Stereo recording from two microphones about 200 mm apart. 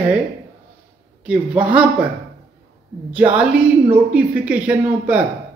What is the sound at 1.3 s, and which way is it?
Speech, 5° right (ahead or behind).